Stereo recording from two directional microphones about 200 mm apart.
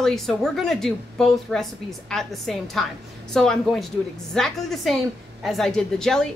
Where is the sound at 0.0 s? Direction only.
Centre (ahead or behind).